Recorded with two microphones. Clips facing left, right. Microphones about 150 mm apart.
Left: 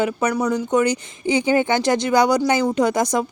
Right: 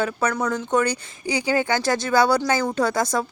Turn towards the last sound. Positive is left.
turn(degrees=15)  # may be behind; listen again after turning